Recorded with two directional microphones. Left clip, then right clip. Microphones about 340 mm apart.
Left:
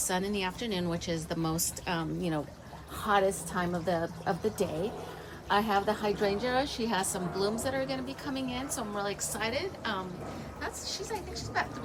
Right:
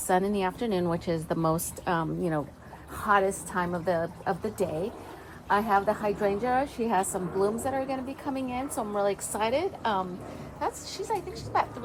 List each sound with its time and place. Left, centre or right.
0.1 s a woman's voice: centre
5.5 s a woman's voice: centre